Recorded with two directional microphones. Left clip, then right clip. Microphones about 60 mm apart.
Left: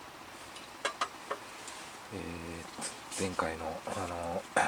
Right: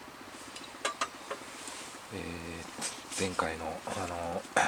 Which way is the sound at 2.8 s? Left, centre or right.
Centre.